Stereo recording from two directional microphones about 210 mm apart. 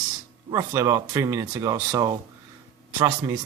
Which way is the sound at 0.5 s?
15° right (ahead or behind).